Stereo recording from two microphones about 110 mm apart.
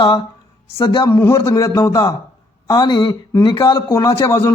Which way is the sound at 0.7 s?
50° left (ahead or behind).